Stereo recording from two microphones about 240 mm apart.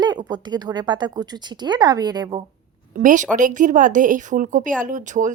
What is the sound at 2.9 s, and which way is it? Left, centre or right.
A woman's voice, right.